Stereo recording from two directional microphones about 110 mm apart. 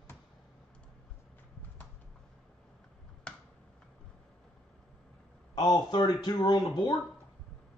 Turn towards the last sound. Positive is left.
turn(degrees=40)  # may be behind; listen again after turning